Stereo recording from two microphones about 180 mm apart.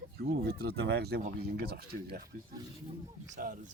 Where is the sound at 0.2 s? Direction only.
60° right (ahead or behind).